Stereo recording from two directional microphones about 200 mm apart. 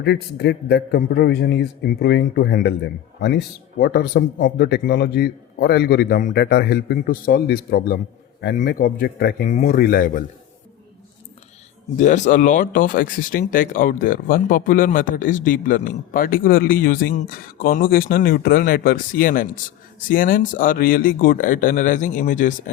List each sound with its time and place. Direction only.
0.0 s speech: 55° left (ahead or behind)
11.9 s speech: 35° left (ahead or behind)